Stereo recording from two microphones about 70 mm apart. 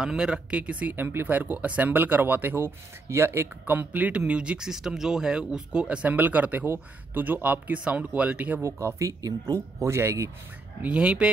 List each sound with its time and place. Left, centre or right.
0.0 s speech: centre
8.6 s speech: right
10.8 s speech: centre